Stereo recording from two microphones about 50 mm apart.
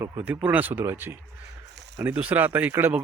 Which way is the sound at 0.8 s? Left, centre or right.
Right.